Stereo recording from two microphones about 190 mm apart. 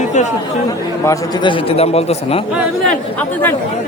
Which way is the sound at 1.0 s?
25° left (ahead or behind).